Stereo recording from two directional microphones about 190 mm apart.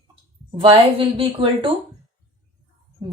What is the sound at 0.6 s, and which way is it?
Speech, 30° right (ahead or behind).